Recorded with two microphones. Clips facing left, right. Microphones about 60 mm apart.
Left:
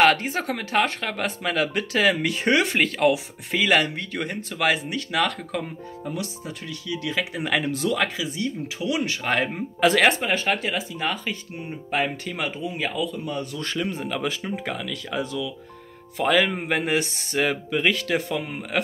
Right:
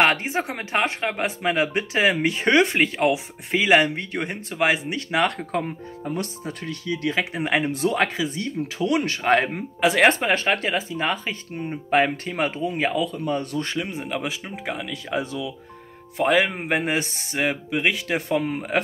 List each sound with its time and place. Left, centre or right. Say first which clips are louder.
0.0 s speech: left 1 dB; centre; by 9.5 s right
9.8 s speech: left 1 dB; centre
10.0 s speech: right 2 dB; right
12.4 s speech: right 4 dB; right
13.6 s speech: right 1 dB; right
17.4 s speech: left 1 dB; centre
18.4 s speech: right 5 dB; right